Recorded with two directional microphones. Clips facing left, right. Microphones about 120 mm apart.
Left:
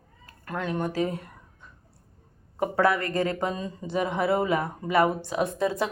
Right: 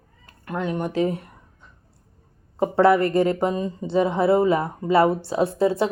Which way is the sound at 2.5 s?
25° right (ahead or behind).